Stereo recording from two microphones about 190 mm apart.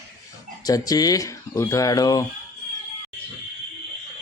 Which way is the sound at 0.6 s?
20° left (ahead or behind).